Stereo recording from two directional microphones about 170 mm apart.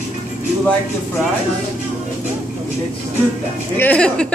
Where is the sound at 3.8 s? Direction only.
5° left (ahead or behind).